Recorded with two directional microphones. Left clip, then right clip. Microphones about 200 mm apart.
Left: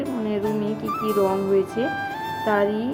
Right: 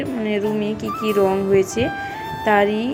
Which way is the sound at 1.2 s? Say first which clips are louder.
Right 4 dB; centre (ahead or behind).